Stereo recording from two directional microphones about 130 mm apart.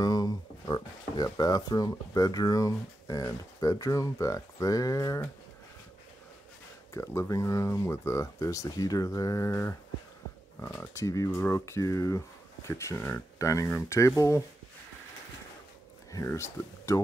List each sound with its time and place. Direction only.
0.0 s speech: 30° left (ahead or behind)
6.9 s speech: 25° left (ahead or behind)
16.1 s speech: 25° left (ahead or behind)